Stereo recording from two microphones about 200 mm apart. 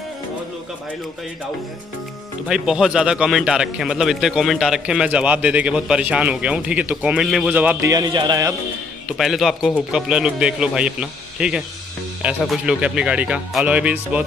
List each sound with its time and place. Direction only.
2.4 s a man's voice: 5° right (ahead or behind)
7.9 s a man's voice: 20° right (ahead or behind)
9.1 s a man's voice: centre (ahead or behind)